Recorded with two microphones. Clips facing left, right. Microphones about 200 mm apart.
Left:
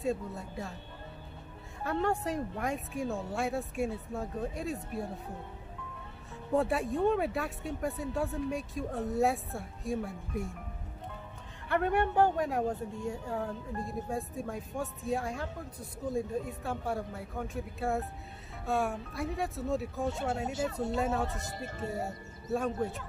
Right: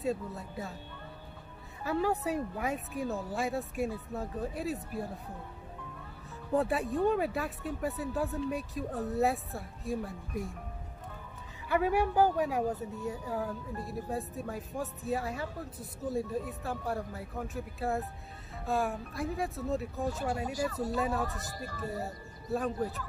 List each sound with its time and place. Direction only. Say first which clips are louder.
0.0 s speech: even; centre (ahead or behind)
1.8 s speech: right 1 dB; 5° right (ahead or behind)
6.5 s speech: even; centre (ahead or behind)
11.7 s speech: even; 5° right (ahead or behind)
21.2 s speech: left 1 dB; 20° left (ahead or behind)
21.9 s speech: left 1 dB; centre (ahead or behind)